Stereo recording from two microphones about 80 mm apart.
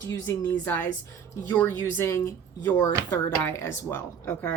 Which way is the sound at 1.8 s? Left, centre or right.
Left.